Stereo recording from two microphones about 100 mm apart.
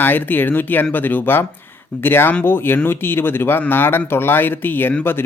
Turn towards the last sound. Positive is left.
turn(degrees=20)  # may be behind; listen again after turning